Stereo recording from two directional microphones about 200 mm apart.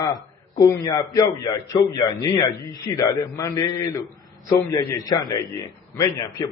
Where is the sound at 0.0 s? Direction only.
20° left (ahead or behind).